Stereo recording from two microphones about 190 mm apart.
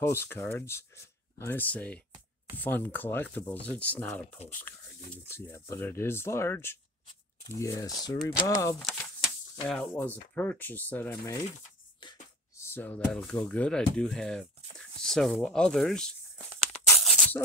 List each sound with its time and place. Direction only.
0.0 s speech: 10° left (ahead or behind)
8.8 s speech: 5° left (ahead or behind)
12.5 s speech: 10° left (ahead or behind)
17.0 s tearing: centre (ahead or behind)